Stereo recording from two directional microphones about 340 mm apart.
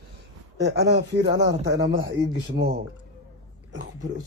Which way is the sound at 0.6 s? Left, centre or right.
Right.